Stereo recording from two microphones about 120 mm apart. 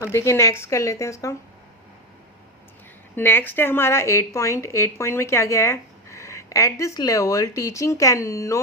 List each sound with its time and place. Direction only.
0.0 s speech: 20° left (ahead or behind)
3.2 s speech: 15° left (ahead or behind)